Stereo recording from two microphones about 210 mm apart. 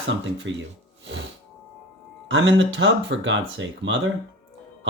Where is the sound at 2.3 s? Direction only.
60° right (ahead or behind).